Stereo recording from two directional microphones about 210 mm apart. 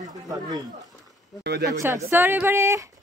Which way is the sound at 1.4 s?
50° right (ahead or behind).